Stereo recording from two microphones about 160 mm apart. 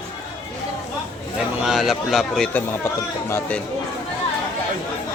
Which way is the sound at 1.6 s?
Centre (ahead or behind).